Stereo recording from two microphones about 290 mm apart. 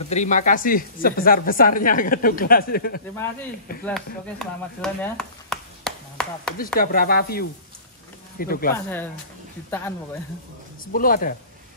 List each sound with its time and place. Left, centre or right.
0.1 s a woman's voice: left
3.8 s speech: centre
6.6 s speech: left
8.7 s speech: centre
10.9 s a woman's voice: left